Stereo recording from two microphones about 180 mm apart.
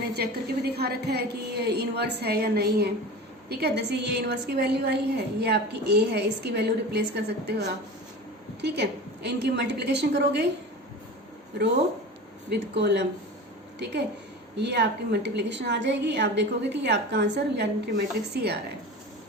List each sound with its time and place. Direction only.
0.1 s a woman's voice: 65° right (ahead or behind)
12.5 s a woman's voice: 70° right (ahead or behind)
14.5 s a woman's voice: 70° right (ahead or behind)